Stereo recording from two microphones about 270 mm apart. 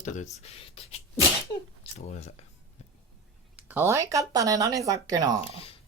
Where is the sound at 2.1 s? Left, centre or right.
Left.